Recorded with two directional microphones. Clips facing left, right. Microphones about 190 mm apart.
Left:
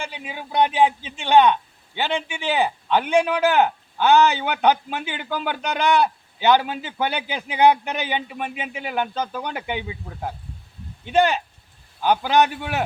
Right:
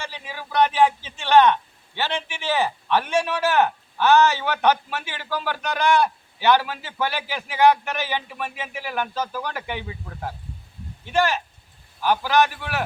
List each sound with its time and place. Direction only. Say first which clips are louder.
0.3 s a man's voice: even; 15° left (ahead or behind)
11.0 s a man's voice: left 3 dB; 20° left (ahead or behind)